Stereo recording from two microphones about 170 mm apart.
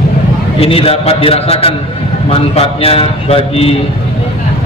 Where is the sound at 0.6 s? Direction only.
35° left (ahead or behind).